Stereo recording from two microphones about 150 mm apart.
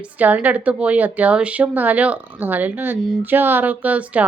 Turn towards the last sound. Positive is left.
turn(degrees=-10)  # may be behind; listen again after turning